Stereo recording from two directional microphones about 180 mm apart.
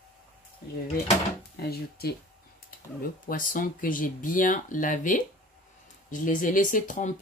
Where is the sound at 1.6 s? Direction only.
60° left (ahead or behind).